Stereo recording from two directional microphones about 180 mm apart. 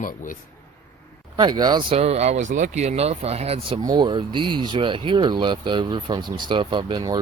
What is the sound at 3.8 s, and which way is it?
Speech, 25° right (ahead or behind).